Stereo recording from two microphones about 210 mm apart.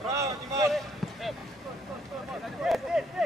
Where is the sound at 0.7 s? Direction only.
Centre (ahead or behind).